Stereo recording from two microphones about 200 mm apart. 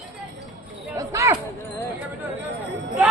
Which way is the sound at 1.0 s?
15° right (ahead or behind).